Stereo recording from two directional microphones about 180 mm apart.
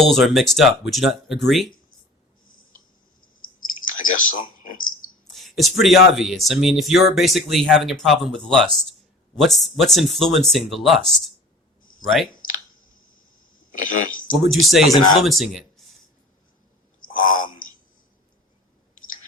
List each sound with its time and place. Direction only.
0.0 s speech: centre (ahead or behind)
3.4 s clicking: 50° left (ahead or behind)
5.3 s speech: centre (ahead or behind)
13.7 s speech: 45° left (ahead or behind)
14.5 s speech: centre (ahead or behind)
17.0 s a sound: 50° left (ahead or behind)